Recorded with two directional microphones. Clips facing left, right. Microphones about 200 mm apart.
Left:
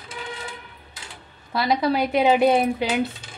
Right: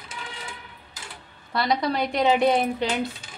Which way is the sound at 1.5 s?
5° left (ahead or behind).